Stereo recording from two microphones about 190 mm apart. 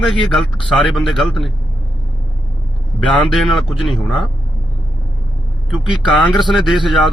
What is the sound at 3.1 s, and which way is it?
A man's voice, 5° left (ahead or behind).